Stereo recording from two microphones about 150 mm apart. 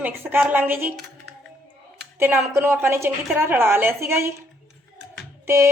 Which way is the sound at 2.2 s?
15° right (ahead or behind).